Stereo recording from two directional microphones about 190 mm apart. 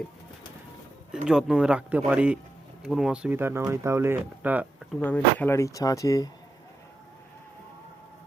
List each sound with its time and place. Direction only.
1.3 s speech: 5° right (ahead or behind)
4.9 s speech: 10° left (ahead or behind)